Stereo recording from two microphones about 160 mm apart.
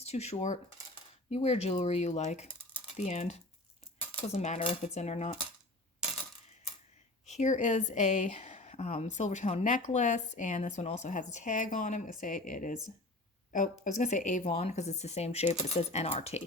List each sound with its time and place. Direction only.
0.0 s coin: 40° left (ahead or behind)
1.3 s a woman's voice: 40° left (ahead or behind)
7.3 s a woman's voice: 45° left (ahead or behind)